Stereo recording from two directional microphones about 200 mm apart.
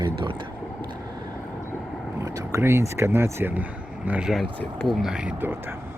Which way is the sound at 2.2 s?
15° right (ahead or behind).